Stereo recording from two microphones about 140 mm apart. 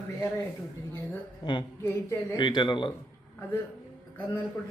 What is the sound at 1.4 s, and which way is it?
Speech, 35° left (ahead or behind).